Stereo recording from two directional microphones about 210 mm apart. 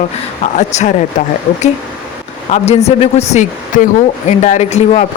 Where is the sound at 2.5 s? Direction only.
30° left (ahead or behind).